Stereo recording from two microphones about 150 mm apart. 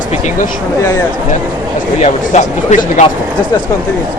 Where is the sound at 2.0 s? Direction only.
50° left (ahead or behind).